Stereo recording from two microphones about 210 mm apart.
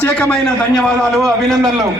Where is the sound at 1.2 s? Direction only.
15° right (ahead or behind).